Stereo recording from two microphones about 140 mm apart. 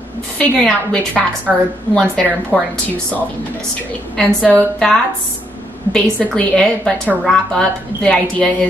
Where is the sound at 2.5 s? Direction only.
10° left (ahead or behind).